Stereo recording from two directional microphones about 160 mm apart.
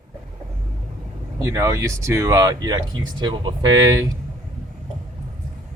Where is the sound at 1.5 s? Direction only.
20° right (ahead or behind).